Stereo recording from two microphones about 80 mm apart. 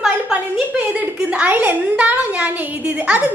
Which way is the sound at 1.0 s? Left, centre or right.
Right.